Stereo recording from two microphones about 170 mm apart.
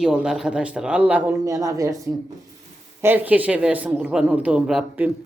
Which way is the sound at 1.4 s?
20° right (ahead or behind).